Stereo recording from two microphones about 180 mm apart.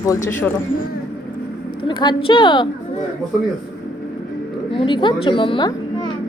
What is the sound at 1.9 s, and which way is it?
Speech, 25° left (ahead or behind).